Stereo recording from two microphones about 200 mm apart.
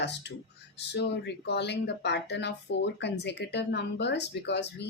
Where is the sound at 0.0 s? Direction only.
60° left (ahead or behind).